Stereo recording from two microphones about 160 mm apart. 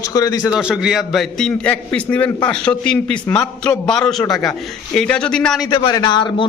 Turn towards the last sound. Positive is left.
turn(degrees=30)  # may be behind; listen again after turning